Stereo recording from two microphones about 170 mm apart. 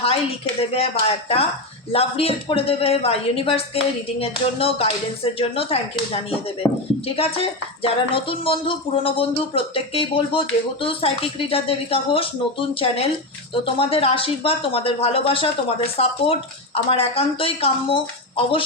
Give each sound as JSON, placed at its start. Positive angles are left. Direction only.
{"t": 0.7, "sound": "speech", "side_deg": 35}
{"t": 6.6, "sound": "speech", "side_deg": 10}
{"t": 7.2, "sound": "speech", "side_deg": 35}